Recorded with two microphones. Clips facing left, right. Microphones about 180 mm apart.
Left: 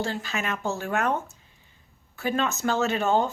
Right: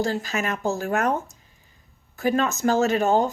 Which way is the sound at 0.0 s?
40° right (ahead or behind).